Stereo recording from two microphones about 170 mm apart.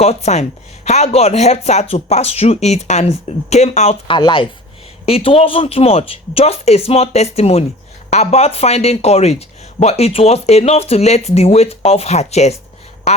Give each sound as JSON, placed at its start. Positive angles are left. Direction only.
{"t": 0.0, "sound": "speech", "side_deg": 40}